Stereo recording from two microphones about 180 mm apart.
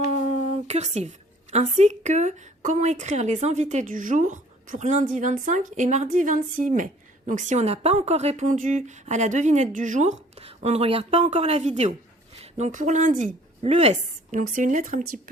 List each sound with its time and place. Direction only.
0.1 s a woman's voice: 40° right (ahead or behind)